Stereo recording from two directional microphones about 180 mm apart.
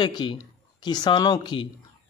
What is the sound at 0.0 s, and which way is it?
A man's voice, 25° left (ahead or behind).